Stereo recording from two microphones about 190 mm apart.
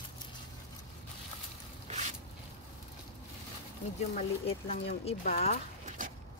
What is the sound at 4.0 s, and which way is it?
Speech, 35° left (ahead or behind).